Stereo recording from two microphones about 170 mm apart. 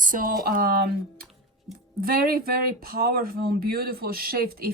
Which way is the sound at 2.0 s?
60° right (ahead or behind).